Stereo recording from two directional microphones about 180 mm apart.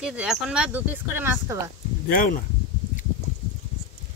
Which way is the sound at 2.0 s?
50° left (ahead or behind).